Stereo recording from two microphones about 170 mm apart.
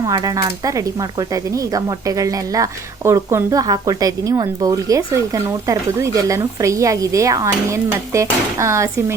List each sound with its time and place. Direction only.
0.0 s speech: 20° right (ahead or behind)